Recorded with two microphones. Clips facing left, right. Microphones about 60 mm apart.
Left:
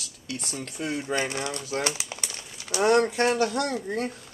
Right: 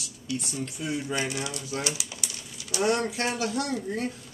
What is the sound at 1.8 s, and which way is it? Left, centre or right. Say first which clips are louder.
Pigeon: left 3 dB; left.